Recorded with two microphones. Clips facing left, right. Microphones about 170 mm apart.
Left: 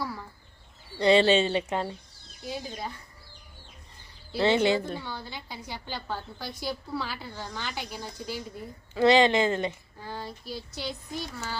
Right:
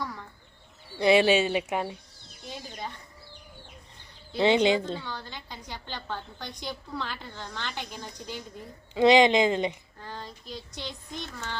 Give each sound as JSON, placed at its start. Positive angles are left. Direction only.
{"t": 0.0, "sound": "bird", "side_deg": 5}
{"t": 0.9, "sound": "speech", "side_deg": -10}
{"t": 2.4, "sound": "speech", "side_deg": 5}
{"t": 4.4, "sound": "speech", "side_deg": -15}
{"t": 4.9, "sound": "a woman's voice", "side_deg": 10}
{"t": 9.0, "sound": "speech", "side_deg": -15}
{"t": 10.0, "sound": "a woman's voice", "side_deg": 10}